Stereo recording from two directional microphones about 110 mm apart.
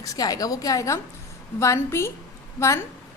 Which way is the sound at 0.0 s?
30° left (ahead or behind).